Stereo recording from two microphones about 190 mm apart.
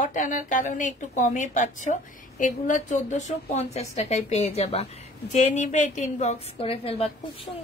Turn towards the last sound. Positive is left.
turn(degrees=30)  # may be behind; listen again after turning